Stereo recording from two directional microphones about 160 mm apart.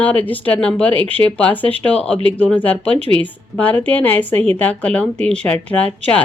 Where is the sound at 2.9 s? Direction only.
35° right (ahead or behind).